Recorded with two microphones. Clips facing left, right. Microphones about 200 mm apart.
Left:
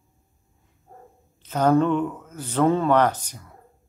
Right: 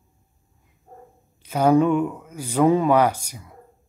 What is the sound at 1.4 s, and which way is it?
Speech, 10° right (ahead or behind).